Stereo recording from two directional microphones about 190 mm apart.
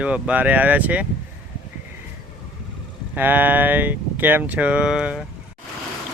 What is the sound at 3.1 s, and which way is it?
Speech, 10° right (ahead or behind).